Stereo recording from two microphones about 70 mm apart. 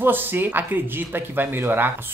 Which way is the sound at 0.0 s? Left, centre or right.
Right.